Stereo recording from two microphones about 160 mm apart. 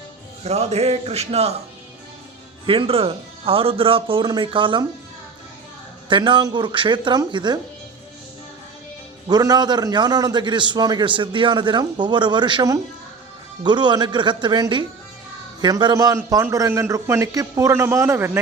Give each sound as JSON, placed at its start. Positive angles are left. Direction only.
{"t": 0.4, "sound": "speech", "side_deg": -40}
{"t": 2.6, "sound": "speech", "side_deg": -35}
{"t": 6.1, "sound": "a man's voice", "side_deg": -30}
{"t": 9.2, "sound": "a man's voice", "side_deg": -25}